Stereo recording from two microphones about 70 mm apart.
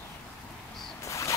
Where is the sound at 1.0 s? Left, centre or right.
Left.